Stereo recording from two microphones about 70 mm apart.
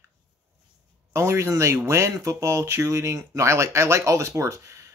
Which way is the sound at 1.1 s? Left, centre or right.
Right.